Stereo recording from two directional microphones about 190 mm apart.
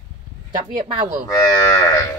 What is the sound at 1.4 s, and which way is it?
Speech, 15° left (ahead or behind).